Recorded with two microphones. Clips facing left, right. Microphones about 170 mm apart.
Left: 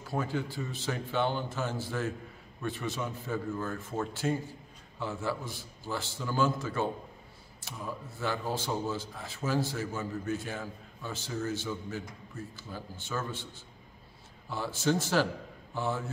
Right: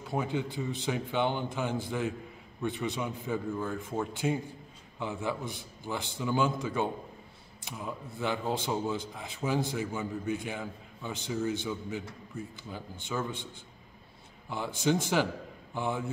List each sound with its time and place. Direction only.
0.0 s a man's voice: 20° right (ahead or behind)
14.5 s a man's voice: 15° right (ahead or behind)